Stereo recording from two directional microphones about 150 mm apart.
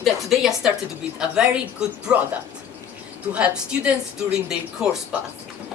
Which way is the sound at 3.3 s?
5° right (ahead or behind).